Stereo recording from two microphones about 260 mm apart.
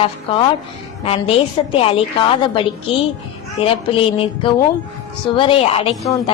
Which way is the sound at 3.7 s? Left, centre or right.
Left.